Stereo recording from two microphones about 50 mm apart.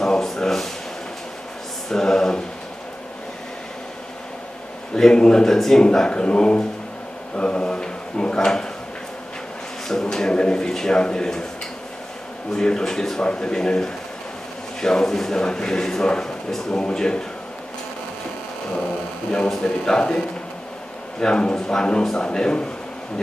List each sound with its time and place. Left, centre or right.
0.0 s a sound: centre
1.9 s a sound: centre
4.9 s a man's voice: centre
9.8 s a man's voice: centre
12.5 s a man's voice: centre
19.3 s a man's voice: centre
21.2 s a man's voice: centre